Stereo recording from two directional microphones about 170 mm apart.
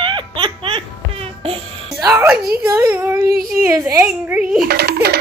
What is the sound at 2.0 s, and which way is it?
Music, 15° right (ahead or behind).